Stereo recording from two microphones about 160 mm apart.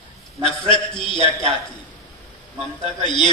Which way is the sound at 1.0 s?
30° left (ahead or behind).